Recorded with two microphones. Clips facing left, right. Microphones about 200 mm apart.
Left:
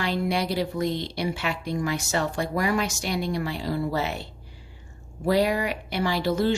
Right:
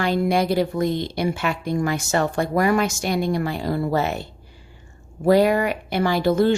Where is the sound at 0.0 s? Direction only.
50° right (ahead or behind).